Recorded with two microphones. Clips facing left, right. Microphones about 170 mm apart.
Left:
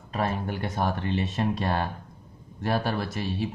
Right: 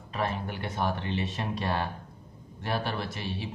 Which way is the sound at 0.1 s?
45° left (ahead or behind).